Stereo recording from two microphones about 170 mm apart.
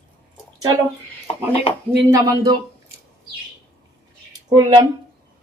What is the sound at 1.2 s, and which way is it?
Speech, 35° left (ahead or behind).